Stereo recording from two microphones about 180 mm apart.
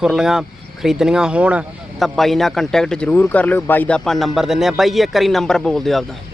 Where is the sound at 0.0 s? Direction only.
5° right (ahead or behind).